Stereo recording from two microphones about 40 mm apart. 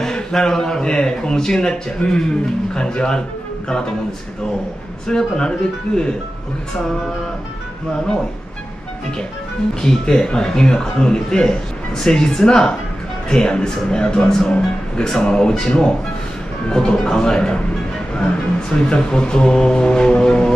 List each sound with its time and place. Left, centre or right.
0.0 s speech: centre
5.0 s speech: centre
9.8 s speech: centre